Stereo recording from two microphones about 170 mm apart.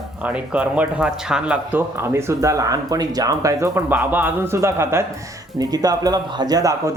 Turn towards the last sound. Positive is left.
turn(degrees=-20)  # may be behind; listen again after turning